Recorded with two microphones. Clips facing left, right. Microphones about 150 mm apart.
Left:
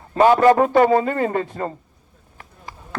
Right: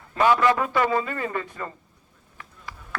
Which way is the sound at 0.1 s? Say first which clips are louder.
Left 6 dB; 40° left (ahead or behind).